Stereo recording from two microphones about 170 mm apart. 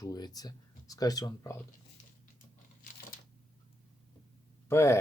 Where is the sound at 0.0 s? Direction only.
20° left (ahead or behind).